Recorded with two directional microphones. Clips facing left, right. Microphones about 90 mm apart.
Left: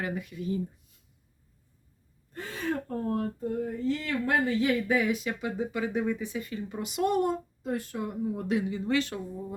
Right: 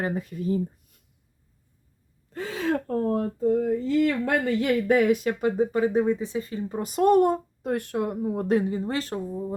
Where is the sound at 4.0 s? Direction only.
65° right (ahead or behind).